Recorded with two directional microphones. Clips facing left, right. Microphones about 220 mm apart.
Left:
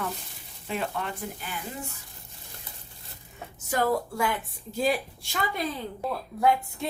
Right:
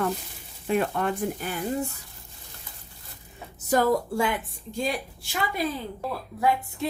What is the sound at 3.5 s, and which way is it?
Speech, 40° right (ahead or behind).